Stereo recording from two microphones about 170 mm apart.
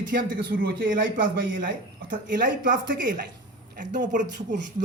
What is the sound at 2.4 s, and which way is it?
Speech, 55° right (ahead or behind).